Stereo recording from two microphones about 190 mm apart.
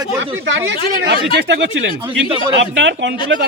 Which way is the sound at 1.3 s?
65° right (ahead or behind).